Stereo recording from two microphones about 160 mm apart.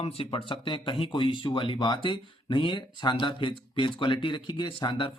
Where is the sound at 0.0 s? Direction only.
35° left (ahead or behind).